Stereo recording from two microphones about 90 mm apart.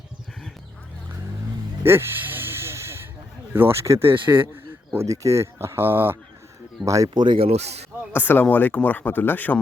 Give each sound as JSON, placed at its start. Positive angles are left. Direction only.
{"t": 1.8, "sound": "a sound", "side_deg": -25}
{"t": 3.5, "sound": "speech", "side_deg": -25}
{"t": 6.8, "sound": "speech", "side_deg": -35}
{"t": 7.1, "sound": "speech", "side_deg": -55}
{"t": 8.1, "sound": "speech", "side_deg": 20}